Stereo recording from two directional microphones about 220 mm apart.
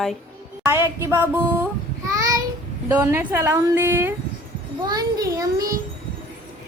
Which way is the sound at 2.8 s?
10° right (ahead or behind).